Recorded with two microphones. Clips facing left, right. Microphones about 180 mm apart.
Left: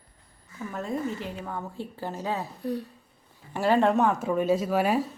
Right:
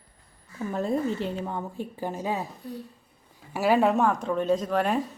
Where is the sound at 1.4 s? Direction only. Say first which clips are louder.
Right 2 dB; 15° right (ahead or behind).